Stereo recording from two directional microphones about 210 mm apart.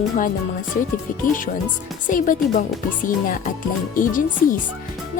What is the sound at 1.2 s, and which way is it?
Speech, 40° left (ahead or behind).